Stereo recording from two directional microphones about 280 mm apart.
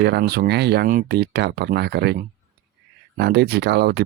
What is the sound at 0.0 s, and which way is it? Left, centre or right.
Speech, right.